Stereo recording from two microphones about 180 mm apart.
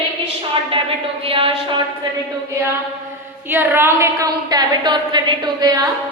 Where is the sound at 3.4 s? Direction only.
10° right (ahead or behind).